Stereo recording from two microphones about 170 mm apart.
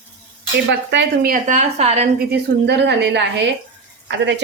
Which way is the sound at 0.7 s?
80° right.